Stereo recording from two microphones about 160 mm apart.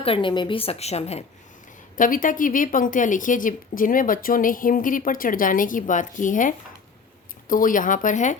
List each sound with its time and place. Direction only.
0.0 s a woman's voice: 35° left (ahead or behind)
2.0 s a woman's voice: 55° left (ahead or behind)